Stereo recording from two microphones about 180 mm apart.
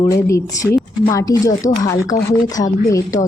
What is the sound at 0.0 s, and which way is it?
Speech, 15° left (ahead or behind).